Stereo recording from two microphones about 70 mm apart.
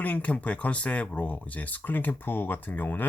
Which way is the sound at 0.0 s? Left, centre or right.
Centre.